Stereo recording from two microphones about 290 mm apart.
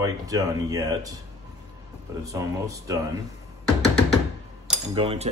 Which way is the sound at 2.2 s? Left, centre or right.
Centre.